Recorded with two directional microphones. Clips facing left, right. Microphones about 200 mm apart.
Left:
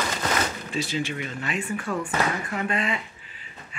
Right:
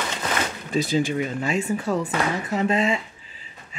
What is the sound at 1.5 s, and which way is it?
Speech, 25° right (ahead or behind).